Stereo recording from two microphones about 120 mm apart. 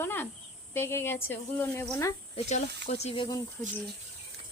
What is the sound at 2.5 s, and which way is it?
Speech, 70° left (ahead or behind).